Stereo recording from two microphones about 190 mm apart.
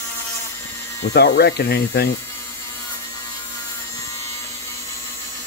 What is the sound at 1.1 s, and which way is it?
Speech, 60° left (ahead or behind).